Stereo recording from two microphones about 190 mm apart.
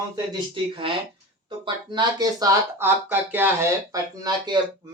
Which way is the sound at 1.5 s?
25° right (ahead or behind).